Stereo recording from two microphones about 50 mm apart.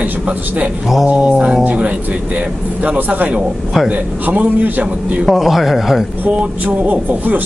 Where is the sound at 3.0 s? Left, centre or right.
Right.